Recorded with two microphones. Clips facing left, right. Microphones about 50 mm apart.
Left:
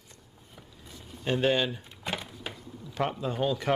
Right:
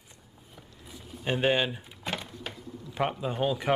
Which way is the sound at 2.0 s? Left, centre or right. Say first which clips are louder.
Even; centre.